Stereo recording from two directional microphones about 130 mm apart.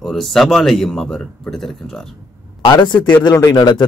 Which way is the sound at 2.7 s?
35° left (ahead or behind).